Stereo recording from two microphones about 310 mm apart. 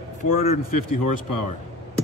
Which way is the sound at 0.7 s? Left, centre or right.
Left.